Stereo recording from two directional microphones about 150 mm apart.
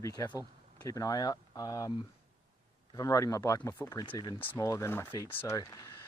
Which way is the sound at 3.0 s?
20° left (ahead or behind).